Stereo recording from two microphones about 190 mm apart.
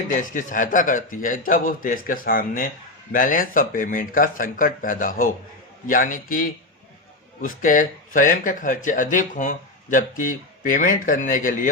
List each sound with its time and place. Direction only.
0.2 s speech: 45° left (ahead or behind)